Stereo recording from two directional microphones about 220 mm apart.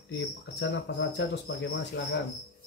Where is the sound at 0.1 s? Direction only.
55° left (ahead or behind).